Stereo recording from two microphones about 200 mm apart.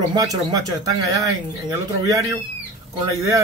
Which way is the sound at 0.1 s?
20° right (ahead or behind).